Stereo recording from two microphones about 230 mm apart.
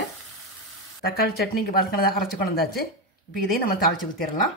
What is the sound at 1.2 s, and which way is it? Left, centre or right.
Speech, left.